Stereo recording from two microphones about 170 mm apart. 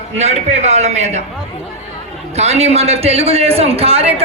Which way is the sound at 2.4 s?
40° right (ahead or behind).